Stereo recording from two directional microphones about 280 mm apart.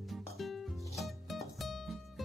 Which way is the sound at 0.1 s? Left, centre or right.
Centre.